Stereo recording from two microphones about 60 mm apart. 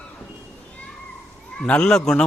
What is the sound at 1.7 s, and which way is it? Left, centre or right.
Speech, centre.